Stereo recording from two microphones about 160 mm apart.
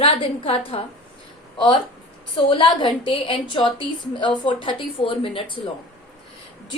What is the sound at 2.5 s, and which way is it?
A woman's voice, 30° left (ahead or behind).